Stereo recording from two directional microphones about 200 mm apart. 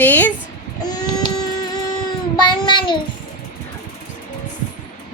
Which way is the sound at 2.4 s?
20° left (ahead or behind).